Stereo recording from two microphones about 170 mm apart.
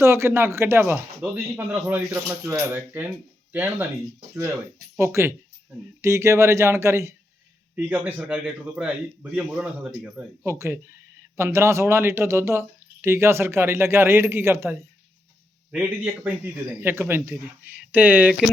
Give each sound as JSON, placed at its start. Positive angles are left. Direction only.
{"t": 0.0, "sound": "speech", "side_deg": -15}
{"t": 4.9, "sound": "speech", "side_deg": -15}